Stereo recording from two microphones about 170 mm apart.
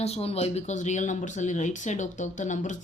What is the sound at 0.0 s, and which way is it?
Speech, 35° left (ahead or behind).